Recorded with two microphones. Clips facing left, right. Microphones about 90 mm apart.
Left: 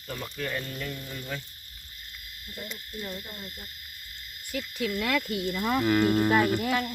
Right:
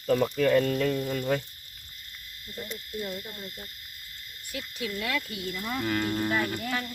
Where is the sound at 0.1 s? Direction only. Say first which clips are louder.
Right 12 dB; 90° right.